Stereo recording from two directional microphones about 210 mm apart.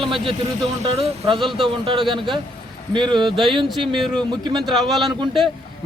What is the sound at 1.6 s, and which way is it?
Speech, 25° right (ahead or behind).